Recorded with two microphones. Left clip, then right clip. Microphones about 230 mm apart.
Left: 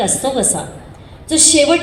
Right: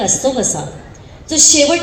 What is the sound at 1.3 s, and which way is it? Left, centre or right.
Speech, left.